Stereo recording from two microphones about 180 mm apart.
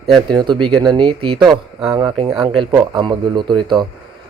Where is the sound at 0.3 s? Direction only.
25° right (ahead or behind).